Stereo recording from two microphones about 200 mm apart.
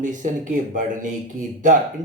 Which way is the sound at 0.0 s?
40° right (ahead or behind).